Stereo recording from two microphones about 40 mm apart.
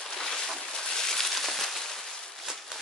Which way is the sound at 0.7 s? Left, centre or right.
Centre.